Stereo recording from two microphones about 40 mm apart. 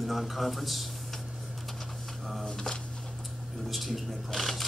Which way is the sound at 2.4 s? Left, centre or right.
Centre.